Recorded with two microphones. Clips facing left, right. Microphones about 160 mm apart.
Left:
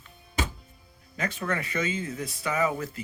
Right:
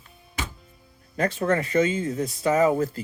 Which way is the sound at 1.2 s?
30° right (ahead or behind).